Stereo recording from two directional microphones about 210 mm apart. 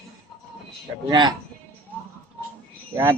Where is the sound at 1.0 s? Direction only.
20° right (ahead or behind).